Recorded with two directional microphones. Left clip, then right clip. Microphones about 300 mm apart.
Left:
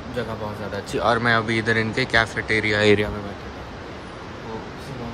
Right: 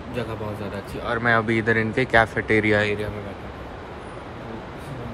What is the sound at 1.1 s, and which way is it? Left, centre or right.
Speech, centre.